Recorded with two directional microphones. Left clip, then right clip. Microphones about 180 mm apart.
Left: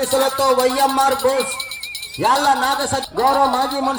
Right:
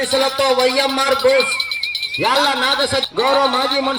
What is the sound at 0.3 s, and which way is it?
Speech, 50° left (ahead or behind).